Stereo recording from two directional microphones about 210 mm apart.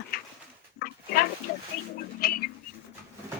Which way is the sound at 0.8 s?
45° left (ahead or behind).